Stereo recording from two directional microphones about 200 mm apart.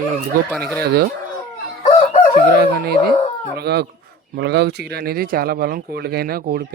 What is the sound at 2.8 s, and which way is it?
Speech, 50° right (ahead or behind).